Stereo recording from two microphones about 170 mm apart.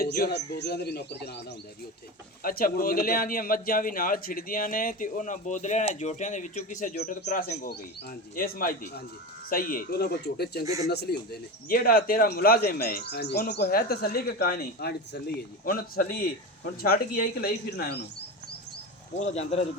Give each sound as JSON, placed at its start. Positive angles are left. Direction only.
{"t": 0.0, "sound": "speech", "side_deg": 65}
{"t": 2.4, "sound": "speech", "side_deg": 60}
{"t": 15.6, "sound": "speech", "side_deg": 60}
{"t": 19.2, "sound": "speech", "side_deg": 40}